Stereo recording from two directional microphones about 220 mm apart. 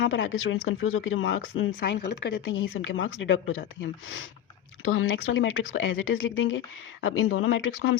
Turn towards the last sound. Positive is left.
turn(degrees=65)  # may be behind; listen again after turning